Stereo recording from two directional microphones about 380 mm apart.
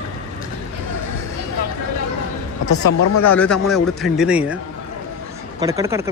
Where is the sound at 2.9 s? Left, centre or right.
Left.